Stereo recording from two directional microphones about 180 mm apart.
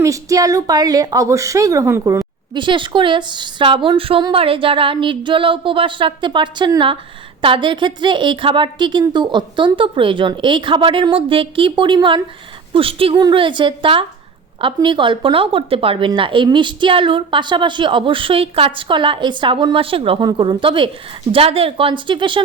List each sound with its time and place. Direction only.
0.0 s a woman's voice: 20° right (ahead or behind)